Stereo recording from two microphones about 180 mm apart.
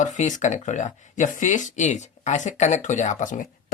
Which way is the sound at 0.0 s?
45° left (ahead or behind).